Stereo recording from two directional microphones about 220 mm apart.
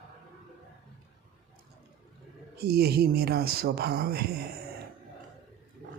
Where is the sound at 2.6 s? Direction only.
45° right (ahead or behind).